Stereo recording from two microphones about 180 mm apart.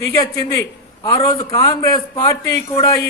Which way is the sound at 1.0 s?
20° left (ahead or behind).